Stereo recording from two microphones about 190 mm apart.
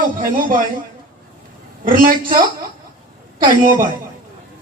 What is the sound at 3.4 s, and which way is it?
Speech, 45° right (ahead or behind).